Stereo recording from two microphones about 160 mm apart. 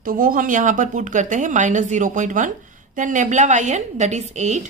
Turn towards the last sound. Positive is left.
turn(degrees=-45)  # may be behind; listen again after turning